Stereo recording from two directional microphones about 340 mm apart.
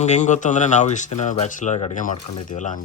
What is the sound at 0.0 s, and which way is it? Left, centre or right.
Speech, left.